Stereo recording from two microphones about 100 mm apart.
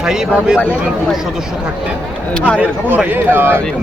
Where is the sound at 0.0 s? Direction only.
5° right (ahead or behind).